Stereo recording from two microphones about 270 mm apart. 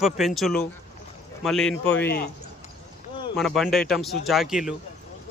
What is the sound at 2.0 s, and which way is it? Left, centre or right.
Speech, left.